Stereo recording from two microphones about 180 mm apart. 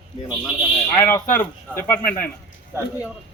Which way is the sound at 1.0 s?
10° left (ahead or behind).